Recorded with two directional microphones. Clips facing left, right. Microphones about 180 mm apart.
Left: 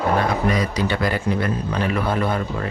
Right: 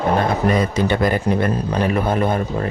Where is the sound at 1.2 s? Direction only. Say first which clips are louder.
Right 3 dB; 40° right (ahead or behind).